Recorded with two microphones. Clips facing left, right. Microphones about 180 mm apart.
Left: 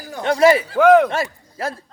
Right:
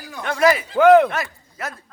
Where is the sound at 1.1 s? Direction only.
30° left (ahead or behind).